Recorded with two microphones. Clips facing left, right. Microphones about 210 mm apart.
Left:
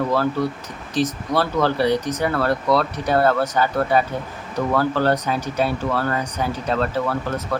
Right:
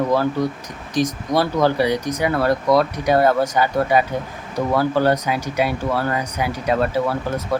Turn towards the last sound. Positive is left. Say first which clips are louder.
# right 2 dB
turn(degrees=-10)  # may be behind; listen again after turning